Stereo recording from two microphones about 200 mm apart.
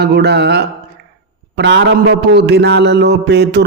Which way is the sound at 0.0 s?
55° right (ahead or behind).